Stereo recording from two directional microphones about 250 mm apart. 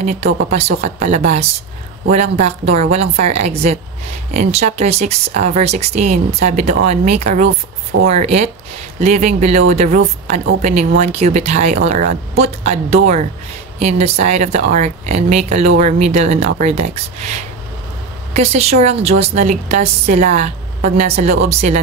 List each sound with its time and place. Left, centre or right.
0.0 s speech: right